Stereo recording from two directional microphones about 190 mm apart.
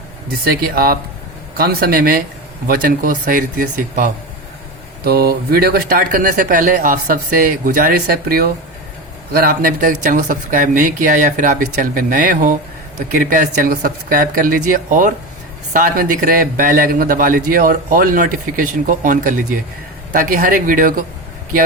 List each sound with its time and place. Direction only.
0.3 s a man's voice: 55° right (ahead or behind)